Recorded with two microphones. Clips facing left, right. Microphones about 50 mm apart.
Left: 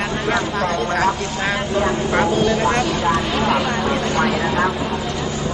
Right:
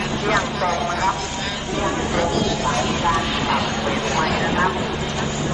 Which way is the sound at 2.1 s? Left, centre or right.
Left.